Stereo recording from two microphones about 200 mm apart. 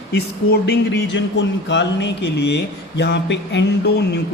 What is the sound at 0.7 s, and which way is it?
Speech, 60° left (ahead or behind).